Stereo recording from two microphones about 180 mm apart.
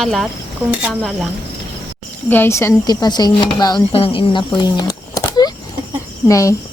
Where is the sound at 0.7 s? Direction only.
5° right (ahead or behind).